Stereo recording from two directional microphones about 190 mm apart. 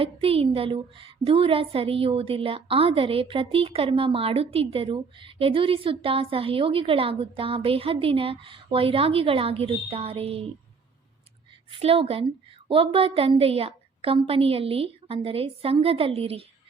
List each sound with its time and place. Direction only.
0.0 s a woman's voice: 30° right (ahead or behind)
11.7 s a woman's voice: 30° right (ahead or behind)